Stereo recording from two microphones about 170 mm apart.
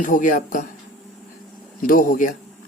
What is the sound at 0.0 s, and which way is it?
Speech, 50° left (ahead or behind).